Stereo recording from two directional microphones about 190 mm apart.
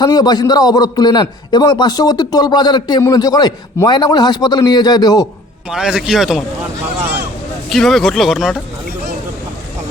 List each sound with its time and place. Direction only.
0.0 s a man's voice: 20° left (ahead or behind)
5.7 s speech: 5° right (ahead or behind)
7.7 s speech: centre (ahead or behind)